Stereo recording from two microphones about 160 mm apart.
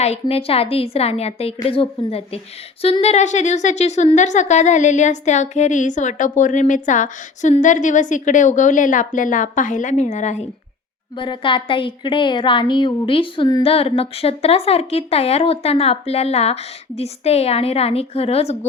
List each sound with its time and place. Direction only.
0.0 s a woman's voice: 40° left (ahead or behind)
11.1 s a woman's voice: 30° left (ahead or behind)